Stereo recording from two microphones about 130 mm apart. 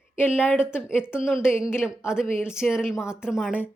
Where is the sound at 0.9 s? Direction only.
10° right (ahead or behind).